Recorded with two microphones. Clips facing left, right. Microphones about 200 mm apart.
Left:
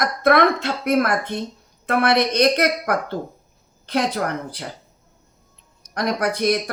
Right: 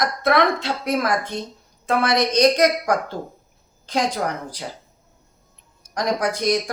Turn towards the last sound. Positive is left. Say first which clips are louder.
# left 1 dB
turn(degrees=60)  # may be behind; listen again after turning